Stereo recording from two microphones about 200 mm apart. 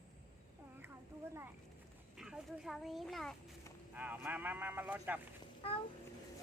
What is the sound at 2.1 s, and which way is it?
Speech, centre (ahead or behind).